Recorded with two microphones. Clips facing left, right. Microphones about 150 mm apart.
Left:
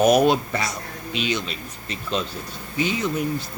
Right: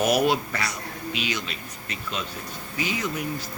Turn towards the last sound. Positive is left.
turn(degrees=25)  # may be behind; listen again after turning